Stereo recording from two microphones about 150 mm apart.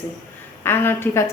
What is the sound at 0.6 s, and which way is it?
Speech, 15° left (ahead or behind).